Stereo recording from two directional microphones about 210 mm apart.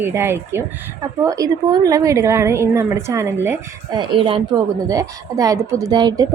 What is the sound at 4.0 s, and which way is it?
A woman's voice, 25° right (ahead or behind).